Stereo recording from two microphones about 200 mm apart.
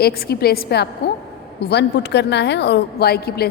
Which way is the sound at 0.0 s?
50° left (ahead or behind).